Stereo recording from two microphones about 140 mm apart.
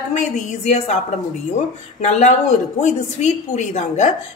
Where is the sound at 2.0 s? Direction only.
55° left (ahead or behind).